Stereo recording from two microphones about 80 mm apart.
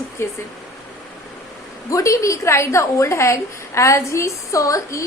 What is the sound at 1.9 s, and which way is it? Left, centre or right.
A woman's voice, left.